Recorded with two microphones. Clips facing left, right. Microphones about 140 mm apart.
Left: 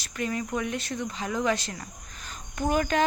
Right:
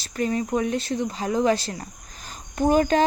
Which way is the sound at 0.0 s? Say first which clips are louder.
Right 6 dB; 30° right (ahead or behind).